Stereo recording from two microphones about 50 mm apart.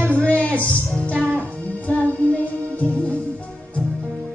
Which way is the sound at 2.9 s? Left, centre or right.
Left.